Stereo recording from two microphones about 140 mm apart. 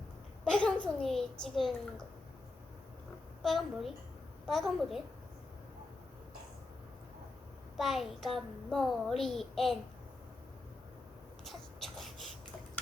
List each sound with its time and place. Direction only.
0.4 s a child's voice: 5° left (ahead or behind)
3.4 s a child's voice: centre (ahead or behind)
7.8 s a child's voice: centre (ahead or behind)
11.4 s a sound: centre (ahead or behind)